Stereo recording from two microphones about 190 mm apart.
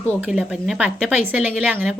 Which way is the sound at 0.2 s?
5° right (ahead or behind).